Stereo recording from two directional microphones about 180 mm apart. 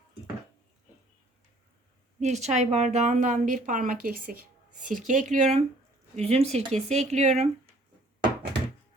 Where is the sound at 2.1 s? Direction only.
40° right (ahead or behind).